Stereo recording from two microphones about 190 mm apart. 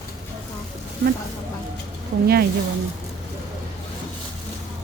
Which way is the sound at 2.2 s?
55° right (ahead or behind).